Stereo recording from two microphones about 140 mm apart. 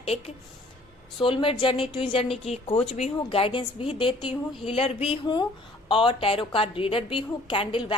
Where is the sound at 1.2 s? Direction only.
40° left (ahead or behind).